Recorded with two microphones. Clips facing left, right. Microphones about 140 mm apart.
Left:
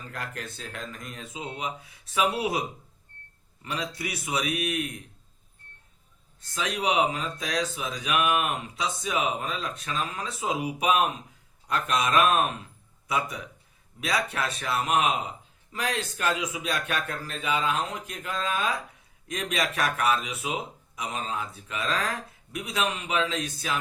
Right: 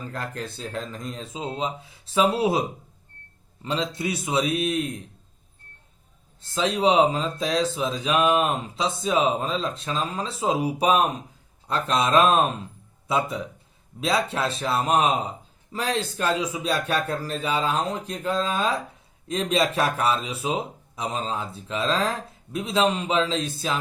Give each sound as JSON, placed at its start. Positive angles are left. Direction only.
{"t": 0.0, "sound": "speech", "side_deg": -30}
{"t": 6.4, "sound": "a man's voice", "side_deg": -25}